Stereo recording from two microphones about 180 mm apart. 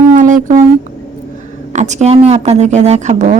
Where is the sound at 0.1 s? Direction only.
45° right (ahead or behind).